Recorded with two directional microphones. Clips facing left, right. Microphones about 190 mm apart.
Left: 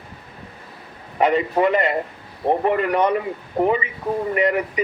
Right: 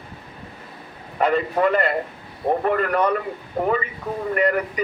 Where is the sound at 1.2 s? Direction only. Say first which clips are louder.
Left 2 dB; 15° left (ahead or behind).